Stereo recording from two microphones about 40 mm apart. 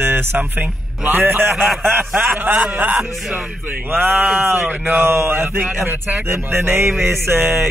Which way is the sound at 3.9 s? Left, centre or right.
Right.